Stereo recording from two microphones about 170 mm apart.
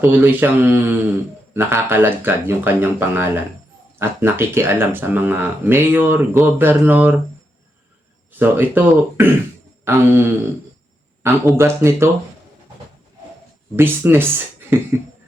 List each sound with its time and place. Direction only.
0.0 s speech: 10° right (ahead or behind)
8.3 s speech: 10° right (ahead or behind)
11.5 s speech: 15° right (ahead or behind)
13.7 s speech: 15° right (ahead or behind)